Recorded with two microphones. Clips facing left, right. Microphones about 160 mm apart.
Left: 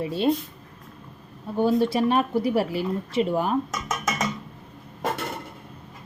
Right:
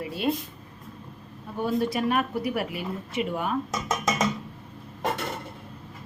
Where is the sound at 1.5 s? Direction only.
25° left (ahead or behind).